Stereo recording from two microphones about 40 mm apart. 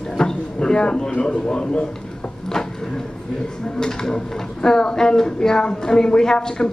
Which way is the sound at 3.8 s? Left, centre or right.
Centre.